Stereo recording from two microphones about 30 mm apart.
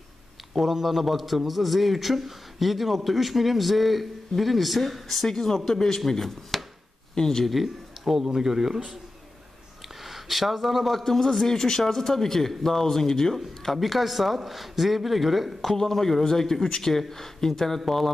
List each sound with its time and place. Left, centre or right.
0.5 s a man's voice: centre
5.2 s speech: centre
7.6 s a man's voice: centre
10.0 s speech: centre
11.1 s speech: centre
15.6 s speech: centre